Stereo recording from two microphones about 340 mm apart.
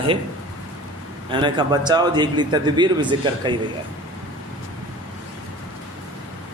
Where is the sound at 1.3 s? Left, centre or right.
Centre.